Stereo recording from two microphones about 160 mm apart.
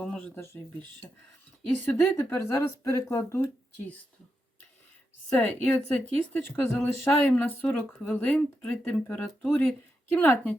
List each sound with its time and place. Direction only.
0.0 s speech: 10° left (ahead or behind)
1.8 s speech: 15° left (ahead or behind)
5.3 s speech: 10° left (ahead or behind)